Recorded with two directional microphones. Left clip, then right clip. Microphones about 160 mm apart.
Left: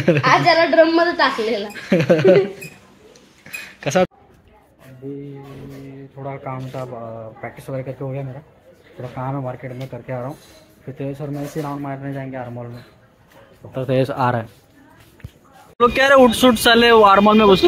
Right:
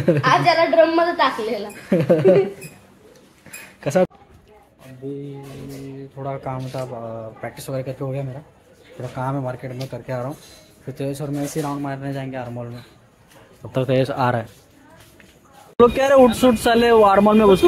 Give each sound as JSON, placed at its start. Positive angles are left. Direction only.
{"t": 0.2, "sound": "a woman's voice", "side_deg": 45}
{"t": 1.8, "sound": "speech", "side_deg": -5}
{"t": 3.8, "sound": "speech", "side_deg": -10}
{"t": 5.0, "sound": "speech", "side_deg": -25}
{"t": 13.8, "sound": "speech", "side_deg": 0}
{"t": 15.8, "sound": "speech", "side_deg": -10}